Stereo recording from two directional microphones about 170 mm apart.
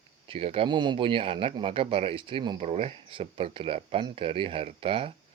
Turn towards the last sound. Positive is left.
turn(degrees=-30)  # may be behind; listen again after turning